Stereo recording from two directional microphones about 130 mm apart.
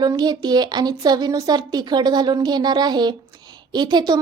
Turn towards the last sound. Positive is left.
turn(degrees=-35)  # may be behind; listen again after turning